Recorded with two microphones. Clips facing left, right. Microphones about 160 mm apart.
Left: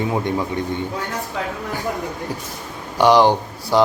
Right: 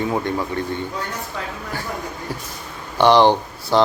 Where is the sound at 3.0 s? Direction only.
10° left (ahead or behind).